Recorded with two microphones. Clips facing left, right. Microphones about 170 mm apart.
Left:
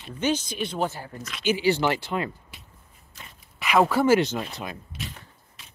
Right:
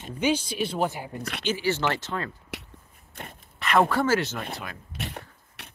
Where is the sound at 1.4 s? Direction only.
15° left (ahead or behind).